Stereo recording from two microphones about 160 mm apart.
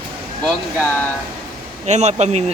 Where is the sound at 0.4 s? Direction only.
10° left (ahead or behind).